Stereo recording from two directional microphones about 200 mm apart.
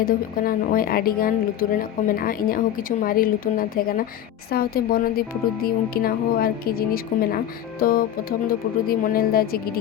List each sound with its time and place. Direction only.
0.0 s speech: 45° left (ahead or behind)